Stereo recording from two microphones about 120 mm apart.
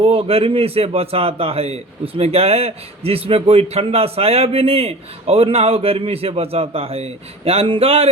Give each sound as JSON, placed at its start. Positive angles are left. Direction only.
{"t": 0.0, "sound": "a man's voice", "side_deg": -55}